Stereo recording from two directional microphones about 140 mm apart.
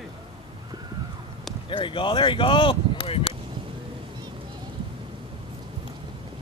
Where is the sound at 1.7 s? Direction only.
35° left (ahead or behind).